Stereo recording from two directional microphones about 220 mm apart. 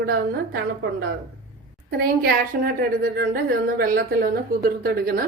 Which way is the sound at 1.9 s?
40° right (ahead or behind).